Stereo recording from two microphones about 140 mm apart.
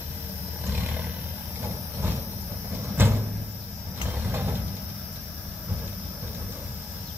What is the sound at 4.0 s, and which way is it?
Vehicle, 15° right (ahead or behind).